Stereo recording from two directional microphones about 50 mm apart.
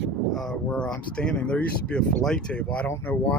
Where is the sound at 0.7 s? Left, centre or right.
Centre.